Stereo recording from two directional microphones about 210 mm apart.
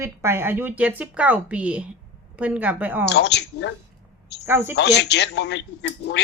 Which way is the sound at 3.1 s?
55° left (ahead or behind).